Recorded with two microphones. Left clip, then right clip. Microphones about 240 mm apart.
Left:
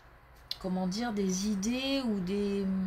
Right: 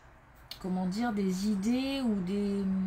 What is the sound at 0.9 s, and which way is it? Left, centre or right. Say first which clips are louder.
Speech: right 2 dB; left.